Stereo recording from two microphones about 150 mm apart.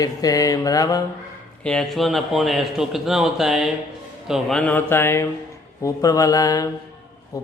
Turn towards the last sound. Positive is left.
turn(degrees=25)  # may be behind; listen again after turning